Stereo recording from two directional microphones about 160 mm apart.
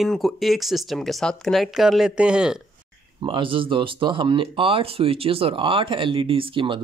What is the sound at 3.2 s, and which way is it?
Speech, 30° right (ahead or behind).